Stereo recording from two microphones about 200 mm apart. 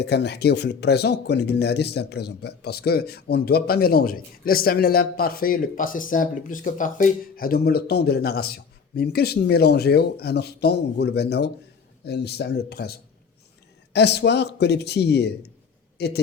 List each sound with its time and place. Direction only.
0.0 s a man's voice: 55° left (ahead or behind)